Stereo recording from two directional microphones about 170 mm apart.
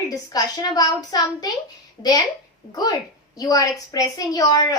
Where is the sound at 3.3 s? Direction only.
20° left (ahead or behind).